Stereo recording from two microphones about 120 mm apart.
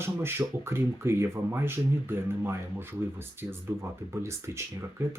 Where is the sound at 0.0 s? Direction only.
20° right (ahead or behind).